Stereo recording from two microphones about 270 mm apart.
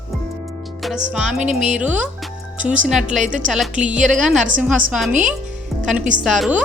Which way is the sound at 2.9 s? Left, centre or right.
Centre.